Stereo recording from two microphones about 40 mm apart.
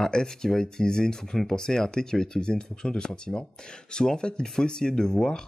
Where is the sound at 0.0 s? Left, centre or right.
Centre.